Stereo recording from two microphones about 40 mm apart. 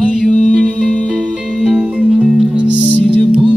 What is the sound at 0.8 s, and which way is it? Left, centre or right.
Music, left.